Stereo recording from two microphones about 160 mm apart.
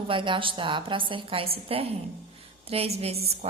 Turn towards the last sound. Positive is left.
turn(degrees=-40)  # may be behind; listen again after turning